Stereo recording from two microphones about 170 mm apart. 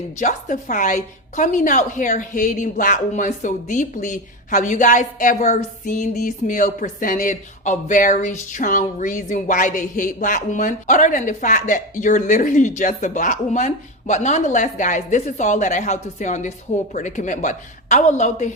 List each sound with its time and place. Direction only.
0.2 s a woman's voice: 45° left (ahead or behind)